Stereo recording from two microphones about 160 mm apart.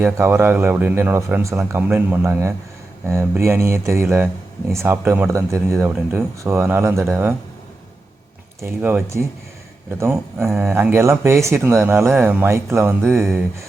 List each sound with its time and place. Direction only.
0.0 s speech: 15° right (ahead or behind)
8.6 s speech: 15° right (ahead or behind)
10.3 s speech: centre (ahead or behind)
10.7 s speech: 15° right (ahead or behind)